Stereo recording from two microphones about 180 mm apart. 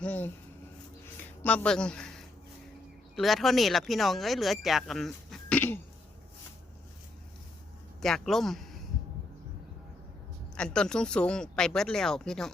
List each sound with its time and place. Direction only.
0.0 s speech: 10° left (ahead or behind)
8.0 s speech: centre (ahead or behind)
10.6 s speech: 5° left (ahead or behind)